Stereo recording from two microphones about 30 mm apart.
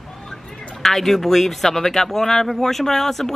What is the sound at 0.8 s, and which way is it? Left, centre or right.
A man's voice, centre.